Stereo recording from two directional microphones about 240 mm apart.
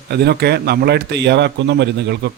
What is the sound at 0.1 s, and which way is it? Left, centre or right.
Speech, right.